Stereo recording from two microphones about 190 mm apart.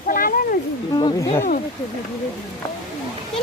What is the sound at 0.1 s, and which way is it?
Cat, 50° left (ahead or behind).